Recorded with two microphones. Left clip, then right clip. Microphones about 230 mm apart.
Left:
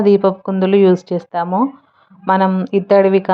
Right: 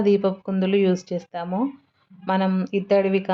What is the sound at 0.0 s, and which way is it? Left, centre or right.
Speech, centre.